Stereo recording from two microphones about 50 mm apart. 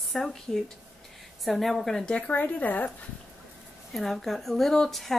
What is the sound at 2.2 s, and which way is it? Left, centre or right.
Speech, left.